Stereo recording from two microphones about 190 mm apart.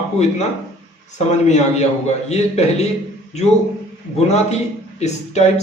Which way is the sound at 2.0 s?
35° left (ahead or behind).